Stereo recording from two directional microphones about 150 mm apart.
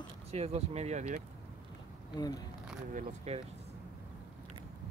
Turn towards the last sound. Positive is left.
turn(degrees=-45)  # may be behind; listen again after turning